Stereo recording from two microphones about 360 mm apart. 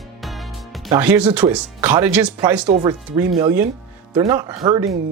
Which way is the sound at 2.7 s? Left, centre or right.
Centre.